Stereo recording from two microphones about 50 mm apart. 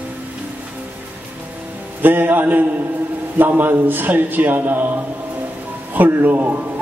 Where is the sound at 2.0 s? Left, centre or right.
Right.